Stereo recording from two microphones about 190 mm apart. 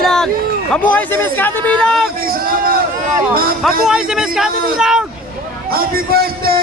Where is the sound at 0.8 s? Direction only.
10° left (ahead or behind).